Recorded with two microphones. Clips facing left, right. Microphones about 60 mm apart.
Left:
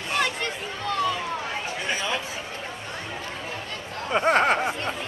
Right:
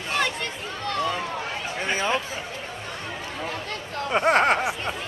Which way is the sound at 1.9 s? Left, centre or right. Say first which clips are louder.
Right 4 dB; right.